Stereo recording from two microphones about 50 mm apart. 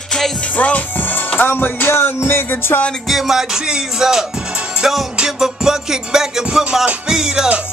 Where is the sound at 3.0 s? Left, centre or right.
Centre.